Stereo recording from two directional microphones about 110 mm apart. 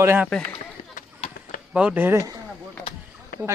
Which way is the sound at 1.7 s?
15° right (ahead or behind).